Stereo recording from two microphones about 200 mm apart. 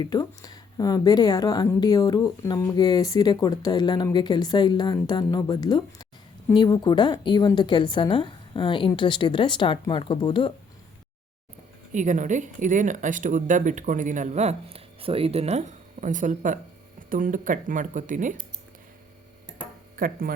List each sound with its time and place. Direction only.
0.0 s speech: 20° left (ahead or behind)
11.9 s speech: 40° right (ahead or behind)
20.0 s speech: 45° right (ahead or behind)